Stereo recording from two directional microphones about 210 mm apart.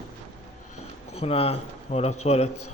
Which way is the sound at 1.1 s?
30° left (ahead or behind).